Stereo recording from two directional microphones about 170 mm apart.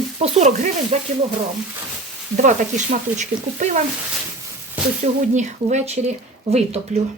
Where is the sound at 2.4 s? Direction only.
50° right (ahead or behind).